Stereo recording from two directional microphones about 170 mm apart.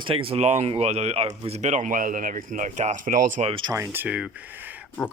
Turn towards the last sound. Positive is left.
turn(degrees=-10)  # may be behind; listen again after turning